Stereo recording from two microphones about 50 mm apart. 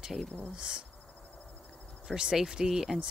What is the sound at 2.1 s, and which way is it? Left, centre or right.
Speech, centre.